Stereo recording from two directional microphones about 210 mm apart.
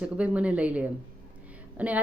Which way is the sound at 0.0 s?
5° right (ahead or behind).